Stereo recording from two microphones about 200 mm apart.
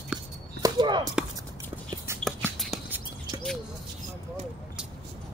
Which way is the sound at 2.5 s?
Centre (ahead or behind).